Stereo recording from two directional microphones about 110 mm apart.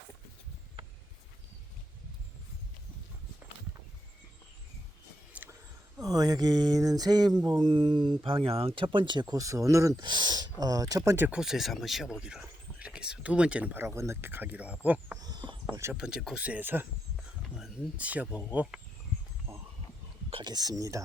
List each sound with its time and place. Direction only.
5.3 s a sound: 15° right (ahead or behind)
6.0 s speech: 35° right (ahead or behind)
10.0 s speech: 40° right (ahead or behind)
11.3 s speech: 5° right (ahead or behind)
13.8 s speech: 25° right (ahead or behind)
15.2 s a sound: 40° right (ahead or behind)
15.9 s speech: 5° right (ahead or behind)
20.4 s speech: 40° right (ahead or behind)